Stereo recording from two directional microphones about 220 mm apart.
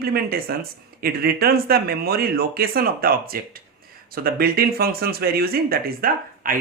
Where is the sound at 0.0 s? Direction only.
45° right (ahead or behind).